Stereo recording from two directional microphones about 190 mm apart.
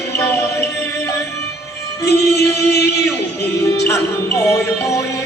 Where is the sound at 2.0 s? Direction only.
60° left (ahead or behind).